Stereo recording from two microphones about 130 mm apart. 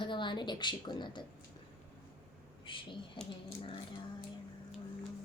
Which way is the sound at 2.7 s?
40° left (ahead or behind).